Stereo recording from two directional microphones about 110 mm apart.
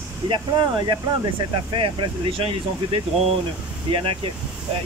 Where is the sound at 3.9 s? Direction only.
55° right (ahead or behind).